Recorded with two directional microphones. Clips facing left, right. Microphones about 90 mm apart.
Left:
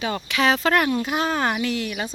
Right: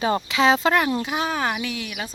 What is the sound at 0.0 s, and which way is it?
Speech, 30° right (ahead or behind).